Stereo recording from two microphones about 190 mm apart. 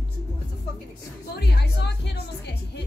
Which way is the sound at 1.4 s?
60° left (ahead or behind).